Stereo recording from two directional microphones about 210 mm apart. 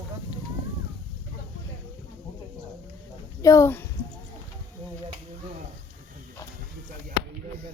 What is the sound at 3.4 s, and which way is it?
Speech, 15° left (ahead or behind).